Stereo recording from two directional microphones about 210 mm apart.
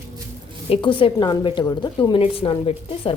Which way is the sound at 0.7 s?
25° left (ahead or behind).